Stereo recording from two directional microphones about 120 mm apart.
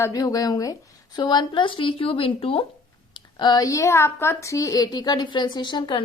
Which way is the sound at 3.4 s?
30° left (ahead or behind).